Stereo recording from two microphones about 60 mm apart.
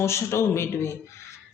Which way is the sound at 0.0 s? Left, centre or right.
Left.